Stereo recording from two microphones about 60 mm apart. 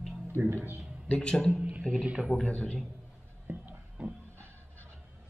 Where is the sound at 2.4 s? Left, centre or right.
Centre.